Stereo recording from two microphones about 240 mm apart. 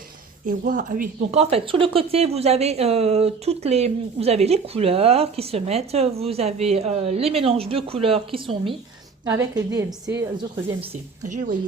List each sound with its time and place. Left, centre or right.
0.4 s a woman's voice: right; by 10.2 s centre
11.3 s speech: right